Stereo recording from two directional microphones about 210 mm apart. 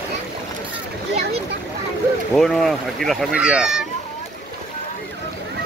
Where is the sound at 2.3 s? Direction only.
Centre (ahead or behind).